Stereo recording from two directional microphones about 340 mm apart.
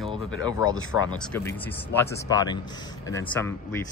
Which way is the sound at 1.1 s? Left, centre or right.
Centre.